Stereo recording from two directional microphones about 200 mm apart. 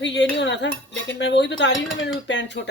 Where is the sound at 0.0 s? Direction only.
60° left (ahead or behind).